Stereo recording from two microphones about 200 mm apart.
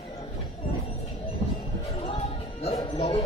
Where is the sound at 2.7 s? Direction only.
25° left (ahead or behind).